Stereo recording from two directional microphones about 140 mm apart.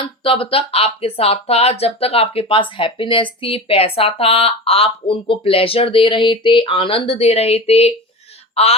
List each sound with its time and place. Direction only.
0.0 s speech: 40° left (ahead or behind)